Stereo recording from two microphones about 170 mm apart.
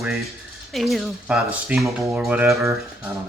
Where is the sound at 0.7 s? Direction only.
Centre (ahead or behind).